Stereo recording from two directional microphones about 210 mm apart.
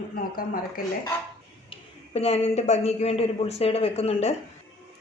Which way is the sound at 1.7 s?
30° left (ahead or behind).